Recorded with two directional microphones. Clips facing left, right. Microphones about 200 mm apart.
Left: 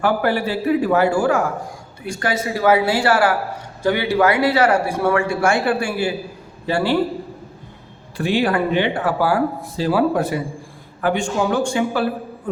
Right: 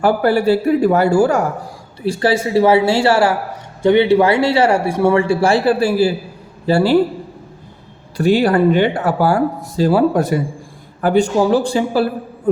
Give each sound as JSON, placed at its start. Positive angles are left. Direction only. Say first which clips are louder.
{"t": 0.0, "sound": "a man's voice", "louder": "right 5 dB", "side_deg": -40}
{"t": 2.0, "sound": "a man's voice", "louder": "right 6 dB", "side_deg": -30}
{"t": 8.2, "sound": "a man's voice", "louder": "right 6 dB", "side_deg": -40}